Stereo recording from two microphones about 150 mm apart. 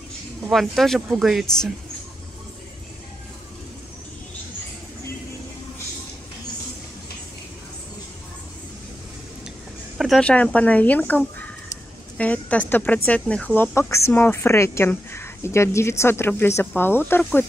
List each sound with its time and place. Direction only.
0.5 s speech: centre (ahead or behind)
9.9 s speech: centre (ahead or behind)